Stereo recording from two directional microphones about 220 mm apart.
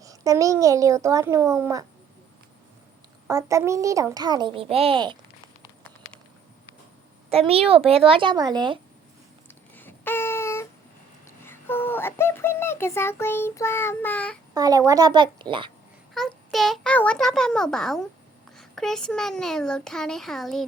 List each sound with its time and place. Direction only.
0.0 s a child's voice: 15° right (ahead or behind)
3.2 s a child's voice: 15° right (ahead or behind)
7.3 s speech: 25° right (ahead or behind)
9.5 s a sound: 10° left (ahead or behind)
11.3 s child singing: 10° left (ahead or behind)
14.5 s a child's voice: 15° right (ahead or behind)
16.1 s speech: centre (ahead or behind)